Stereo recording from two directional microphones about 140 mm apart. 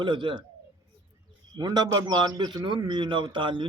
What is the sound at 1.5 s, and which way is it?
A man's voice, 30° right (ahead or behind).